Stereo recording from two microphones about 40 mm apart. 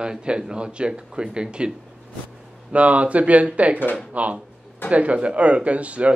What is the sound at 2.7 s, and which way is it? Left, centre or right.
Speech, right.